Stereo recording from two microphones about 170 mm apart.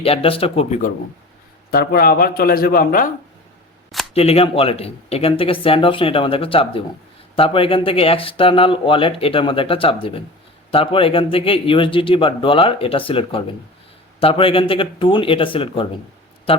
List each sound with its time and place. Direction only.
0.0 s speech: 35° left (ahead or behind)
1.7 s speech: 65° left (ahead or behind)
4.1 s speech: 35° left (ahead or behind)